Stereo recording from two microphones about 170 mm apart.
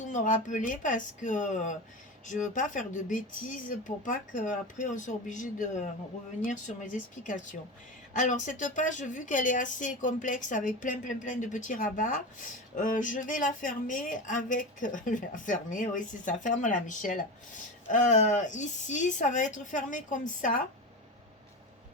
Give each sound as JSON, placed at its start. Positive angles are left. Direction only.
{"t": 0.0, "sound": "a woman's voice", "side_deg": 45}